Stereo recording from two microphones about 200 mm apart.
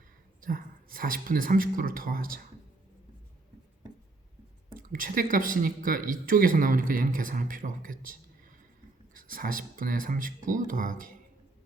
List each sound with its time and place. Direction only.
0.4 s speech: 45° right (ahead or behind)
4.7 s speech: 45° right (ahead or behind)
9.1 s speech: 45° right (ahead or behind)